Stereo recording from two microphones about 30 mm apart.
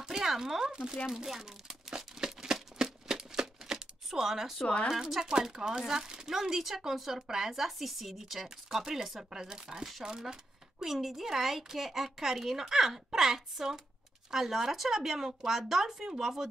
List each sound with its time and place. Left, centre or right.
0.0 s a sound: centre
0.7 s speech: right
1.0 s crumpling: centre
4.1 s speech: centre
9.3 s speech: right